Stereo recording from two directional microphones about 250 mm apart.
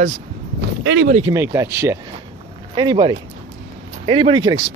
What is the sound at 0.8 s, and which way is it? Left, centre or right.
Speech, right.